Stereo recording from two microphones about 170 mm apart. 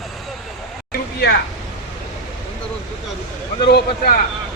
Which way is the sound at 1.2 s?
75° left (ahead or behind).